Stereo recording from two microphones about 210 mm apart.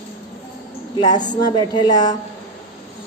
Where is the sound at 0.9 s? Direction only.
20° left (ahead or behind).